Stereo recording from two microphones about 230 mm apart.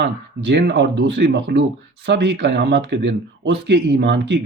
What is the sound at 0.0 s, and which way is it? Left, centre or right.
Speech, right.